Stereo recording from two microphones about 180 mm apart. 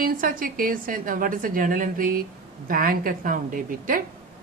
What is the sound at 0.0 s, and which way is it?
A woman's voice, 50° right (ahead or behind).